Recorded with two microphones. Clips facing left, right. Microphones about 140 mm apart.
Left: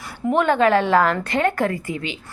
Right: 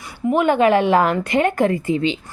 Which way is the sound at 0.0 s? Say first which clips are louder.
Right 1 dB; centre (ahead or behind).